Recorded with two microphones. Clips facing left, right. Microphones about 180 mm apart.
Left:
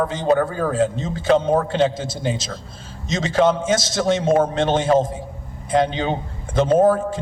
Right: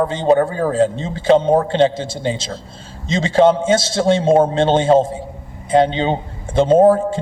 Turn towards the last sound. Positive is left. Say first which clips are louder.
# right 4 dB
turn(degrees=-25)  # may be behind; listen again after turning